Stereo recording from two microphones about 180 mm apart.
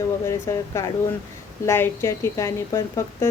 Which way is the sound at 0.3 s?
15° left (ahead or behind).